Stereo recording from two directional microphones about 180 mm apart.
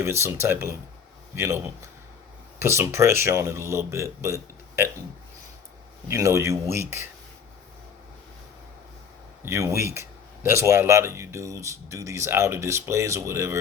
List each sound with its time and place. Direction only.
0.0 s speech: 15° right (ahead or behind)
6.1 s speech: 15° right (ahead or behind)
9.4 s speech: 15° right (ahead or behind)